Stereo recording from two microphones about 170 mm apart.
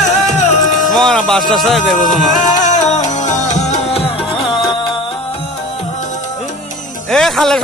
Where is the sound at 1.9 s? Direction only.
50° left (ahead or behind).